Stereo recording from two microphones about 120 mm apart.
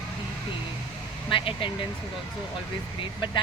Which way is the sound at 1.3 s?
45° left (ahead or behind).